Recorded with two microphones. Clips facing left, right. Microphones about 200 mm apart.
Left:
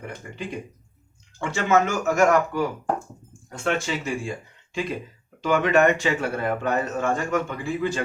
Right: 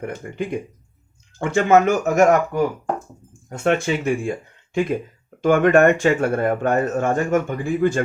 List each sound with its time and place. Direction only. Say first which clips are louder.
0.0 s speech: right 7 dB; 55° right (ahead or behind)
3.6 s speech: right 6 dB; 55° right (ahead or behind)